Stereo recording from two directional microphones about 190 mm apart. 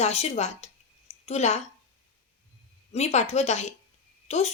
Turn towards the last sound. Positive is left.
turn(degrees=35)  # may be behind; listen again after turning